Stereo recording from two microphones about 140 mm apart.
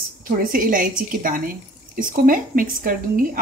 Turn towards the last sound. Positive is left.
turn(degrees=-90)